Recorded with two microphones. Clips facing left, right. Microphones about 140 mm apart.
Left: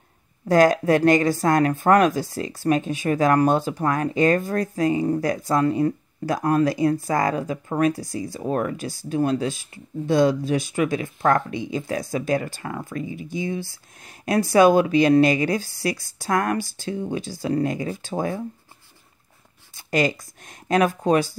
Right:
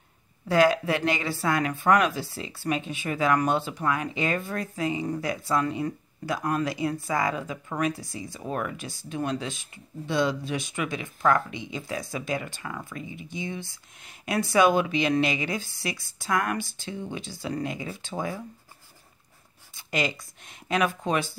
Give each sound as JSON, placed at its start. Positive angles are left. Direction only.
{"t": 0.5, "sound": "speech", "side_deg": 45}
{"t": 19.7, "sound": "a sound", "side_deg": 40}
{"t": 20.6, "sound": "speech", "side_deg": 40}